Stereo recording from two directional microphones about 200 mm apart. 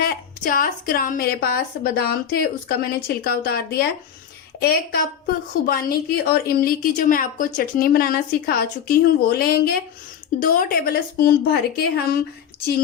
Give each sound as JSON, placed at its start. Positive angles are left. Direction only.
{"t": 0.0, "sound": "a woman's voice", "side_deg": 45}